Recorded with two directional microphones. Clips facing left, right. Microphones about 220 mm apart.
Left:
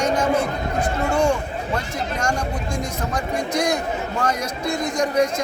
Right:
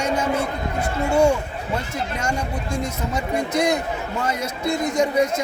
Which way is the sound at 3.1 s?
5° right (ahead or behind).